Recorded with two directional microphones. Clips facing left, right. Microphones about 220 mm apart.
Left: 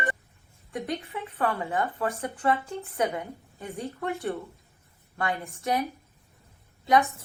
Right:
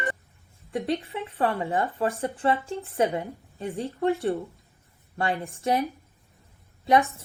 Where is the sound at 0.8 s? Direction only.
30° right (ahead or behind).